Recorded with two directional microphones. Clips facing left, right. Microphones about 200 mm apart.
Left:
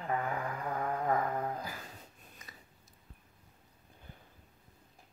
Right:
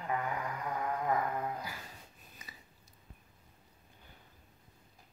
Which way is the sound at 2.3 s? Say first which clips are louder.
Even; 5° right (ahead or behind).